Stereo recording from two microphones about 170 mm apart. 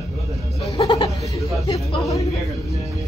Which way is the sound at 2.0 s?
20° left (ahead or behind).